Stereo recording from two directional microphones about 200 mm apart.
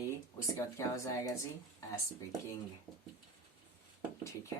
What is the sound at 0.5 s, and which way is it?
Speech, 15° left (ahead or behind).